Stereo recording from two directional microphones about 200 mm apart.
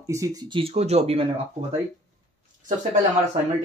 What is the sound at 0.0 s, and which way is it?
Speech, 15° right (ahead or behind).